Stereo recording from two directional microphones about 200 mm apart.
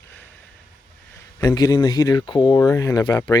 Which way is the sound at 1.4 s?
20° left (ahead or behind).